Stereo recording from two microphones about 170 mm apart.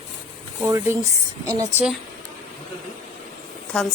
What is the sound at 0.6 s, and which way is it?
A woman's voice, 15° right (ahead or behind).